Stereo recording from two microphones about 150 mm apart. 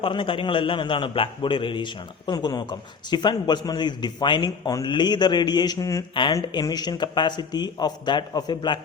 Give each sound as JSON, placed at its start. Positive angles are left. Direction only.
{"t": 0.0, "sound": "a man's voice", "side_deg": 35}